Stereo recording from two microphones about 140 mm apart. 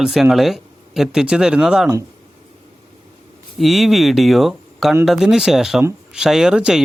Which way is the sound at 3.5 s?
Centre (ahead or behind).